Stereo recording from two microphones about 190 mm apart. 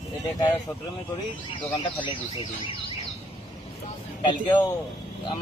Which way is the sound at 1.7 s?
25° left (ahead or behind).